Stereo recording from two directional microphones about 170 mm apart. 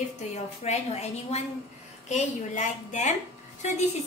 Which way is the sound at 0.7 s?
40° left (ahead or behind).